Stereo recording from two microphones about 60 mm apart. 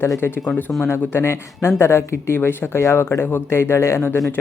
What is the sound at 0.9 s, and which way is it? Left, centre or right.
Speech, left.